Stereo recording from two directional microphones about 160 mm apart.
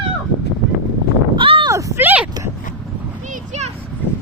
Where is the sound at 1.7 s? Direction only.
15° right (ahead or behind).